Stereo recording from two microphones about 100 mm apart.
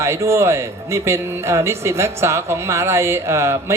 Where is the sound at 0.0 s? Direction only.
25° right (ahead or behind).